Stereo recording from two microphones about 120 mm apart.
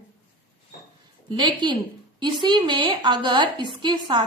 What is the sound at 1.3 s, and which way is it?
A woman's voice, 40° right (ahead or behind).